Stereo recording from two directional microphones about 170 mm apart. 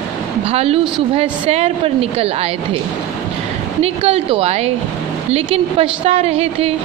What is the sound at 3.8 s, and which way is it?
Speech, 35° right (ahead or behind).